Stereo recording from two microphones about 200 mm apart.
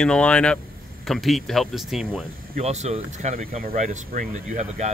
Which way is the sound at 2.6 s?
35° right (ahead or behind).